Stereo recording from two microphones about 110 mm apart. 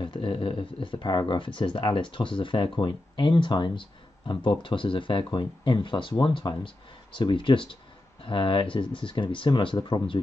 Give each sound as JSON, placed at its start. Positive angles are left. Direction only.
{"t": 0.0, "sound": "speech", "side_deg": 50}